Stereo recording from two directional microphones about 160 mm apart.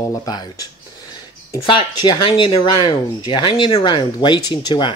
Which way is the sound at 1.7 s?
30° left (ahead or behind).